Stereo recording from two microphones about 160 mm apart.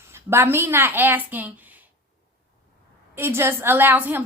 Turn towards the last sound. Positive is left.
turn(degrees=-10)  # may be behind; listen again after turning